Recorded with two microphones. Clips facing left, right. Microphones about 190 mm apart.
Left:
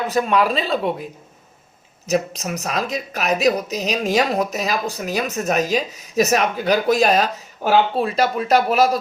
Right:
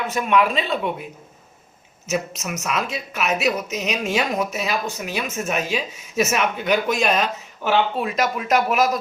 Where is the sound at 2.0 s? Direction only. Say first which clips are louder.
Left 4 dB; 35° left (ahead or behind).